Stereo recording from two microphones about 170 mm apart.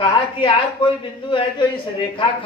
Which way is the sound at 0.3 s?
30° left (ahead or behind).